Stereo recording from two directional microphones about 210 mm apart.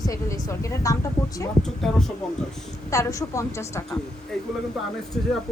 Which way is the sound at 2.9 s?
15° left (ahead or behind).